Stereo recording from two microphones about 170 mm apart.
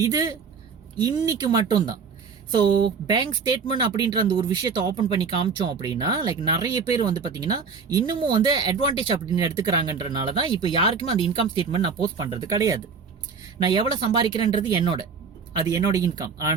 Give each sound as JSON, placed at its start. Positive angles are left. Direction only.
{"t": 0.0, "sound": "speech", "side_deg": -20}
{"t": 6.7, "sound": "speech", "side_deg": 40}
{"t": 7.0, "sound": "speech", "side_deg": -25}